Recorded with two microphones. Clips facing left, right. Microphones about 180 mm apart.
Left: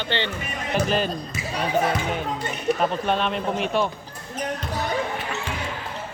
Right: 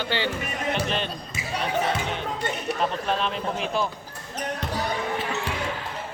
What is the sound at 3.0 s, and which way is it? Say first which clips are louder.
Speech: left 3 dB; centre (ahead or behind).